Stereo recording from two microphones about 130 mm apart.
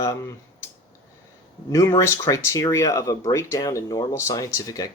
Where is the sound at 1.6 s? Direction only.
25° left (ahead or behind).